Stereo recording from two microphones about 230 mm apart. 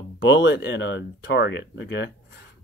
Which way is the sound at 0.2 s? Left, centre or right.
Left.